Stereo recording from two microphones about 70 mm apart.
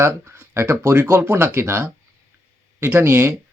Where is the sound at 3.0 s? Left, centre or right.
Right.